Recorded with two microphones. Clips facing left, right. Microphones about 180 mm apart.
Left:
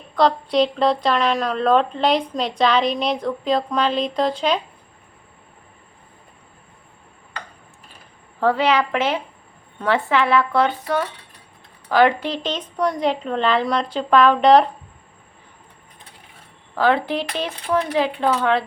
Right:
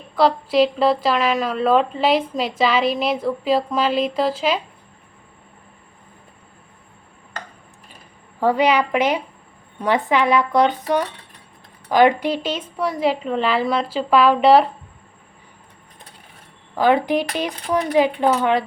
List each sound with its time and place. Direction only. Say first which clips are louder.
0.2 s a woman's voice: right 1 dB; 5° right (ahead or behind)
8.4 s a woman's voice: right 1 dB; 15° right (ahead or behind)
16.7 s speech: right 2 dB; 15° right (ahead or behind)